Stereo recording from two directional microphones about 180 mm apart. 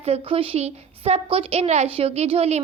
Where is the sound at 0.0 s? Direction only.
30° right (ahead or behind).